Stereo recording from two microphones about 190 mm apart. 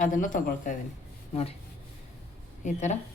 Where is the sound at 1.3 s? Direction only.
30° left (ahead or behind).